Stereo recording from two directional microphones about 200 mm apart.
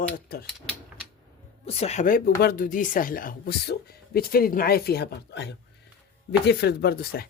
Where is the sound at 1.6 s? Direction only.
30° left (ahead or behind); by 7.3 s 50° left (ahead or behind).